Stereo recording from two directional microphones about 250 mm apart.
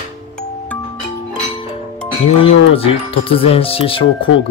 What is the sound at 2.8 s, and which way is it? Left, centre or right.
Speech, left.